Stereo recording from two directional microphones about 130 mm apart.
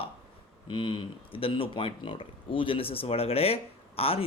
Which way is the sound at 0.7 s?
40° left (ahead or behind).